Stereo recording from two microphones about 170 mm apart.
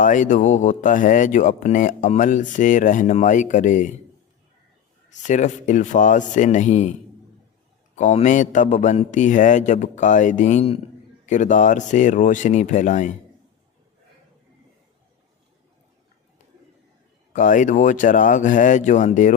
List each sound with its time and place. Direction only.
0.0 s speech: 50° left (ahead or behind)
5.1 s speech: 45° left (ahead or behind)
7.9 s speech: 45° left (ahead or behind)
17.3 s speech: 50° left (ahead or behind)